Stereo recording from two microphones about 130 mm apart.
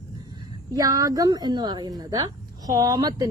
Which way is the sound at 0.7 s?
25° right (ahead or behind).